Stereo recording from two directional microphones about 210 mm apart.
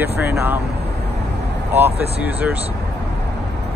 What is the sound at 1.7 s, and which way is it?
Speech, 10° right (ahead or behind).